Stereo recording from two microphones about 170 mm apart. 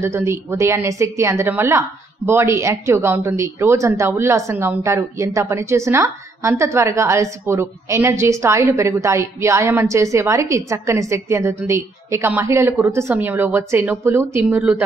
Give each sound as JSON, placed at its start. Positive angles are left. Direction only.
{"t": 0.0, "sound": "a woman's voice", "side_deg": -15}